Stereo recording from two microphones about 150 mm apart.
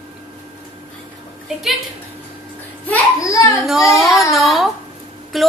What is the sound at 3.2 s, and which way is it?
Speech, 20° left (ahead or behind).